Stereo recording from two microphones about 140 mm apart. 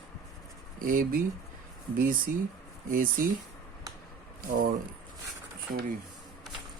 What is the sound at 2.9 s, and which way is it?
Speech, 80° right.